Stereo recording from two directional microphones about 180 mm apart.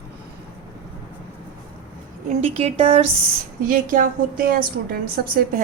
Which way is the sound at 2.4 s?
35° right (ahead or behind).